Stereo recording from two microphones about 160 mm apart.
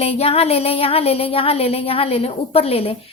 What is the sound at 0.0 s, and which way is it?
Speech, 40° left (ahead or behind).